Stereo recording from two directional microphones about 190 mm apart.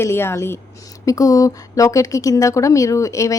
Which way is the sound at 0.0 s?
15° left (ahead or behind).